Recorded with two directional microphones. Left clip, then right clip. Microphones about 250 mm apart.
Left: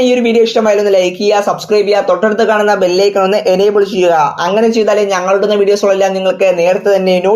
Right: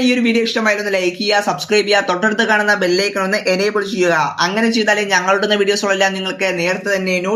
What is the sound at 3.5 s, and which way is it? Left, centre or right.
Speech, left.